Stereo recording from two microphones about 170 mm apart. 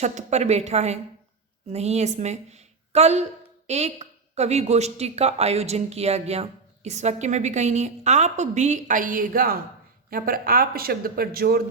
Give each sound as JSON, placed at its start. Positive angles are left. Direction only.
{"t": 0.0, "sound": "a woman's voice", "side_deg": -45}